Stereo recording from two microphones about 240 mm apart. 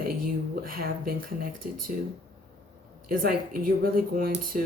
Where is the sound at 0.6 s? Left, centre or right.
Right.